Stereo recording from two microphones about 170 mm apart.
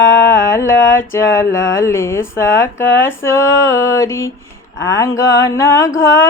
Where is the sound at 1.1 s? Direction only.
20° left (ahead or behind).